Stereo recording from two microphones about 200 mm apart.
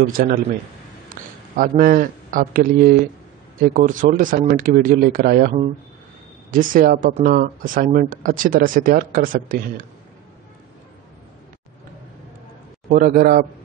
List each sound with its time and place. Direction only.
0.1 s speech: 45° right (ahead or behind)
1.2 s a sound: 45° right (ahead or behind)
1.6 s speech: 45° right (ahead or behind)
12.9 s speech: 45° right (ahead or behind)